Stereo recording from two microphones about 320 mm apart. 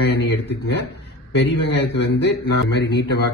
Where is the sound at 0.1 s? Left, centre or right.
Left.